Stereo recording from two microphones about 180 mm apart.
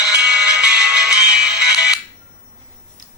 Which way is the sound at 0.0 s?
5° right (ahead or behind).